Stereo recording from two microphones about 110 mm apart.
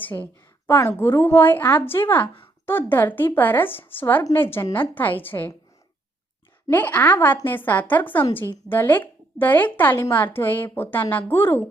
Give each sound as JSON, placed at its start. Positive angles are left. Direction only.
{"t": 0.0, "sound": "a woman's voice", "side_deg": 15}
{"t": 6.7, "sound": "a woman's voice", "side_deg": 15}